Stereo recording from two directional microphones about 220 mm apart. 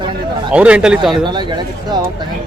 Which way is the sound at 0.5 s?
5° right (ahead or behind).